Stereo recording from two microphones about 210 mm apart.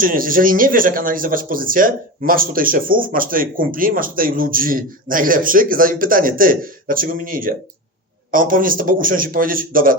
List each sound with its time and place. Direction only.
0.0 s speech: 40° right (ahead or behind)